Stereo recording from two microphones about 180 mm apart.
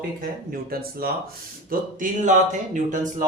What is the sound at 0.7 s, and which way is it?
Speech, 55° right (ahead or behind).